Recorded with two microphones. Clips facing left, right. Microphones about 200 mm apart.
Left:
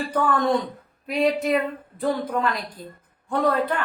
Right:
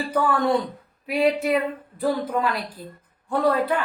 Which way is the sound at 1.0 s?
5° right (ahead or behind).